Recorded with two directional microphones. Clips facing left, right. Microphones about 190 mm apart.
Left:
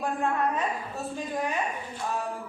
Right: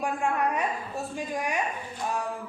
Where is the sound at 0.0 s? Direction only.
15° right (ahead or behind).